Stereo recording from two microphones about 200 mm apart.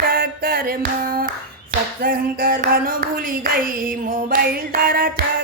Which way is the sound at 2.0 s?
45° right (ahead or behind).